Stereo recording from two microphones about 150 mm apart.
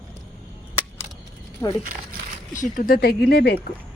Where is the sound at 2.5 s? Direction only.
60° left (ahead or behind); by 3.5 s 90° left.